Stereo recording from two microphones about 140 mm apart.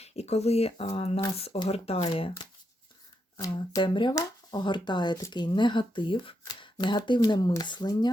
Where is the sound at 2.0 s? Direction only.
35° left (ahead or behind).